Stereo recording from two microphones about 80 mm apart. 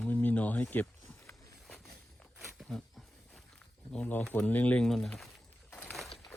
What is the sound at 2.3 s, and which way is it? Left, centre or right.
Wild animals, centre.